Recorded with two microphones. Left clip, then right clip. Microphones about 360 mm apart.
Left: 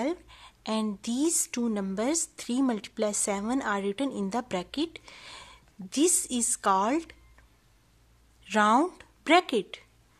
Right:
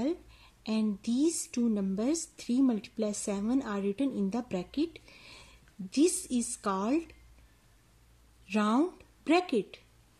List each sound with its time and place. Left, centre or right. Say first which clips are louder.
0.0 s a woman's voice: left 3 dB; centre
8.5 s speech: left 7 dB; centre